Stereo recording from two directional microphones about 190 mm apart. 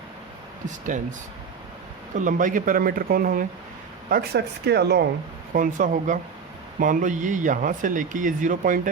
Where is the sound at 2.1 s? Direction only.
45° right (ahead or behind); by 5.0 s 60° right (ahead or behind).